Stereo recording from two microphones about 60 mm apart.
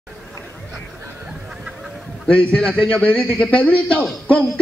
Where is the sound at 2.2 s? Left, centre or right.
Centre.